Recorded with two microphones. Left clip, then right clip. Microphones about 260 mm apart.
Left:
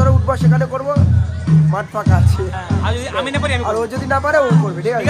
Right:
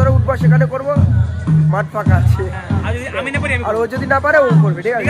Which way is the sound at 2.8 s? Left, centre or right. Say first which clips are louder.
Left 1 dB; centre.